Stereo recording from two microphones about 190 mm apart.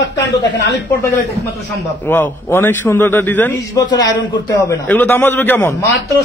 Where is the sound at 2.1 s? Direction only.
10° left (ahead or behind).